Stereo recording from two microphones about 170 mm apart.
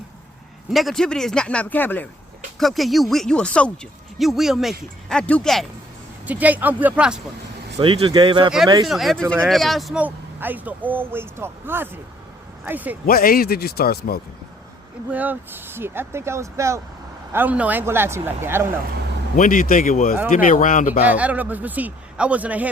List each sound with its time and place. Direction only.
0.7 s speech: centre (ahead or behind)
2.6 s speech: centre (ahead or behind)
6.2 s speech: 10° right (ahead or behind)
7.8 s speech: 30° right (ahead or behind)
8.9 s speech: centre (ahead or behind)
13.1 s speech: 60° left (ahead or behind)
15.1 s speech: 10° right (ahead or behind)
19.4 s speech: 55° left (ahead or behind)
21.1 s speech: 10° right (ahead or behind)